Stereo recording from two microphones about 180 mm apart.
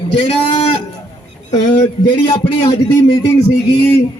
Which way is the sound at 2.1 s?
30° left (ahead or behind).